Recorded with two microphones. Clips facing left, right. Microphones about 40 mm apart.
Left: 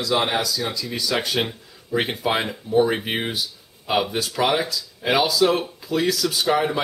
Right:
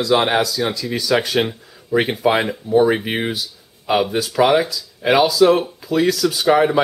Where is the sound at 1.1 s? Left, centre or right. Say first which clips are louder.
Right 7 dB; right.